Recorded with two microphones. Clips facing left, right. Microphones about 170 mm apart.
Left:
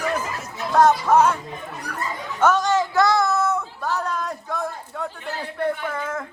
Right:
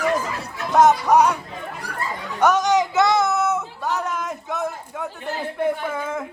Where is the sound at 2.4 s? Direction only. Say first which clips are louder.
Right 1 dB; 15° right (ahead or behind).